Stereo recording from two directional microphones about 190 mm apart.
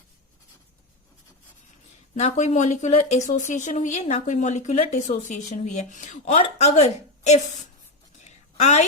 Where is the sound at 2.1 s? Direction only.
35° left (ahead or behind).